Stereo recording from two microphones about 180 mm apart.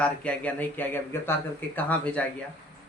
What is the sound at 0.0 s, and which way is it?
Speech, 5° left (ahead or behind).